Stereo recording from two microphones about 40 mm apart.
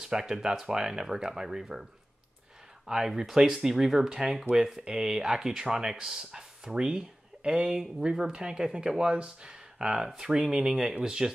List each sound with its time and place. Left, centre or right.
0.0 s speech: centre
2.9 s speech: centre